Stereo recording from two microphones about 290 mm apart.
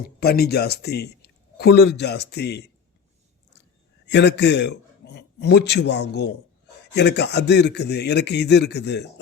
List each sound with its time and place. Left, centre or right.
0.0 s a man's voice: left
4.0 s a man's voice: left